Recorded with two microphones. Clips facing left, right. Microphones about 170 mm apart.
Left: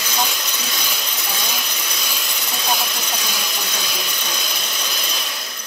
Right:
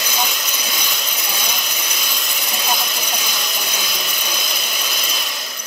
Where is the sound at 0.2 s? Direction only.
Centre (ahead or behind).